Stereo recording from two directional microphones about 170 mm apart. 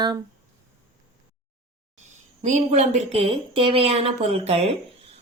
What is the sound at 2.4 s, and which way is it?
A woman's voice, 45° right (ahead or behind).